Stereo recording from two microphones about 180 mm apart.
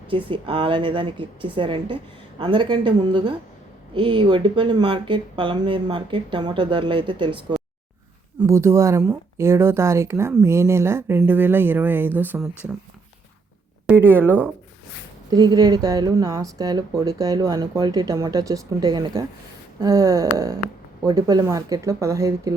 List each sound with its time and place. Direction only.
0.1 s speech: 30° right (ahead or behind)
8.4 s speech: 15° right (ahead or behind)
13.8 s speech: 10° right (ahead or behind)
15.3 s speech: 20° right (ahead or behind)